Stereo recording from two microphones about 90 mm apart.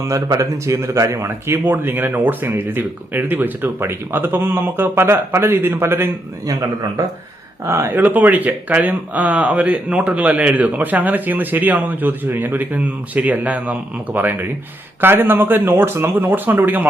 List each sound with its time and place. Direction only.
0.1 s speech: 35° right (ahead or behind)
6.4 s speech: 40° right (ahead or behind)
7.9 s speech: 20° right (ahead or behind)